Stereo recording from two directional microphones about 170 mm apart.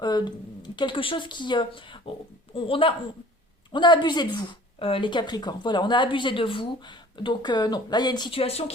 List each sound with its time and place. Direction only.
0.0 s a woman's voice: 25° left (ahead or behind)